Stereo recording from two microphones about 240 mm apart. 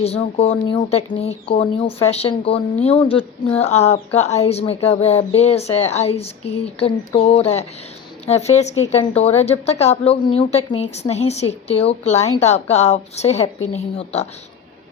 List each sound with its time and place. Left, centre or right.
0.0 s speech: left